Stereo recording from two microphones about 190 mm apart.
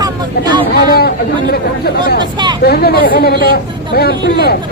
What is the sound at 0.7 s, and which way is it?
Speech, 55° left (ahead or behind).